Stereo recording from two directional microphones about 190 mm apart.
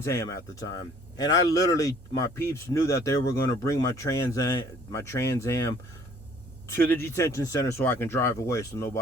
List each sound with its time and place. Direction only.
0.0 s speech: 15° left (ahead or behind)